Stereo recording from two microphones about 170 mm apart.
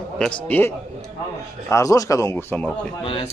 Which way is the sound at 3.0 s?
30° left (ahead or behind).